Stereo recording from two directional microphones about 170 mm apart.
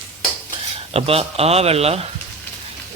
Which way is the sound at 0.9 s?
35° right (ahead or behind).